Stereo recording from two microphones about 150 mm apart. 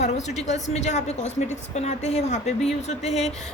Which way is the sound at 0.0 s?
50° left (ahead or behind).